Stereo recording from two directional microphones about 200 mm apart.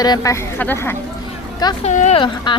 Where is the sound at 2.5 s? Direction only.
25° left (ahead or behind).